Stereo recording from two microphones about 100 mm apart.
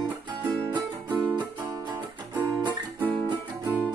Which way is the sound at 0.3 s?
50° right (ahead or behind).